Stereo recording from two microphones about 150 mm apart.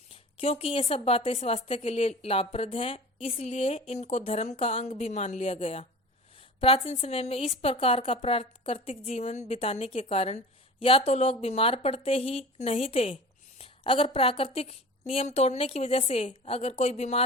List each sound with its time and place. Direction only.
0.1 s a woman's voice: 40° left (ahead or behind)